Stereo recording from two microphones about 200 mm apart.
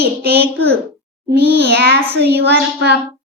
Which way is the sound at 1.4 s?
55° right (ahead or behind).